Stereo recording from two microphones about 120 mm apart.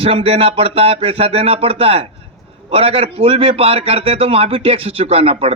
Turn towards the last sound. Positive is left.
turn(degrees=-55)  # may be behind; listen again after turning